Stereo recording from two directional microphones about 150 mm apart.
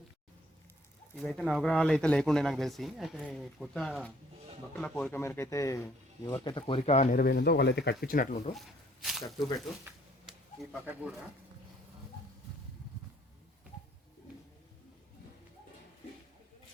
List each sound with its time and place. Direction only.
1.1 s speech: centre (ahead or behind); by 6.4 s 20° left (ahead or behind)
6.4 s speech: 30° left (ahead or behind); by 7.1 s 45° left (ahead or behind)
7.1 s speech: 85° left; by 8.4 s 60° left (ahead or behind)
8.5 s a sound: centre (ahead or behind)
10.2 s pigeon: 5° right (ahead or behind)